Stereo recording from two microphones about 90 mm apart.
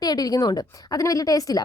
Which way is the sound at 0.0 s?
45° left (ahead or behind).